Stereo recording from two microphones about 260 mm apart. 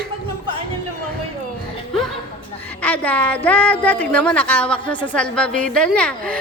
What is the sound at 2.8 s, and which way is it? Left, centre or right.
A woman's voice, centre.